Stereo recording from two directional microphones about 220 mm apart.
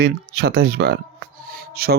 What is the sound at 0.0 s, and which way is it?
Speech, 45° right (ahead or behind).